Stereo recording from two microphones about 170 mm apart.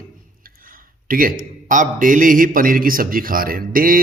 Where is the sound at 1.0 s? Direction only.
55° right (ahead or behind).